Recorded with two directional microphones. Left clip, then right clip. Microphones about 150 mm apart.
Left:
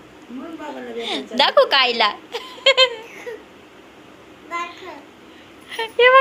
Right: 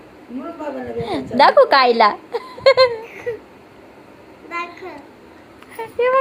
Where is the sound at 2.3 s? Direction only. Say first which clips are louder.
Right 3 dB; 15° right (ahead or behind).